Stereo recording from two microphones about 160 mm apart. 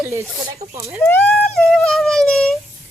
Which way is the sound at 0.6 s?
40° right (ahead or behind).